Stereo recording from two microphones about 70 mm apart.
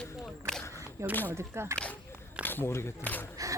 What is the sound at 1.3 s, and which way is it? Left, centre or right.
Speech, right.